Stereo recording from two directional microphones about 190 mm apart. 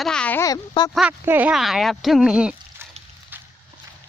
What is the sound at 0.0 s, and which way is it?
Speech, 5° left (ahead or behind).